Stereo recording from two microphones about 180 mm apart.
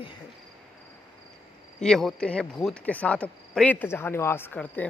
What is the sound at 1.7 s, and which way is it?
Speech, 5° left (ahead or behind).